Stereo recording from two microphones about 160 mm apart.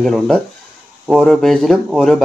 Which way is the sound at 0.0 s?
Centre (ahead or behind).